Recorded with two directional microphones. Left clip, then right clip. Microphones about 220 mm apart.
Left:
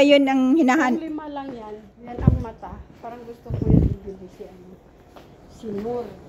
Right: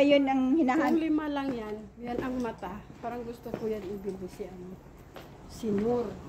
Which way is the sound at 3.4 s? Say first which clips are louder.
Left 2 dB; 20° right (ahead or behind).